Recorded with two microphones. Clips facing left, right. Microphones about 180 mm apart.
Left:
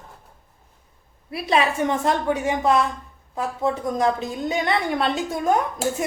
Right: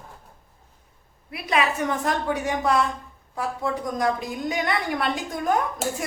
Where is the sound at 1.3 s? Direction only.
30° left (ahead or behind).